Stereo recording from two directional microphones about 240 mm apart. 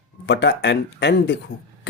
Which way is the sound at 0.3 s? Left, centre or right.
Left.